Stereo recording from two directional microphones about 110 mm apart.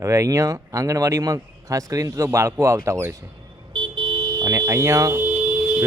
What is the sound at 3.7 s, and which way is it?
Car alarm, 45° right (ahead or behind).